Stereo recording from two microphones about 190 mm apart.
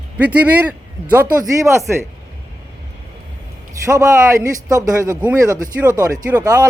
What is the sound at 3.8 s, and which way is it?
A man's voice, 15° right (ahead or behind).